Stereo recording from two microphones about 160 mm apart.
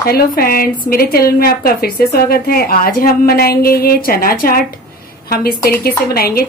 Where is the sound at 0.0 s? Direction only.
70° left (ahead or behind).